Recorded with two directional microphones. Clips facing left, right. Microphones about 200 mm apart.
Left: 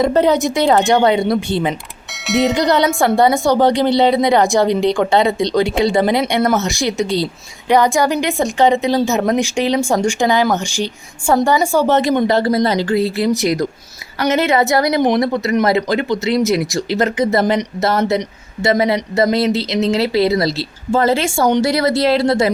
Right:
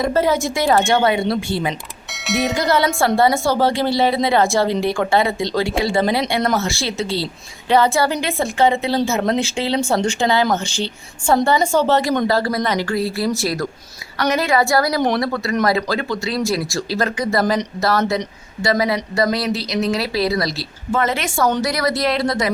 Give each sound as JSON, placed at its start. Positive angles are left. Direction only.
{"t": 0.0, "sound": "speech", "side_deg": 20}
{"t": 2.1, "sound": "speech", "side_deg": 0}
{"t": 2.6, "sound": "speech", "side_deg": 20}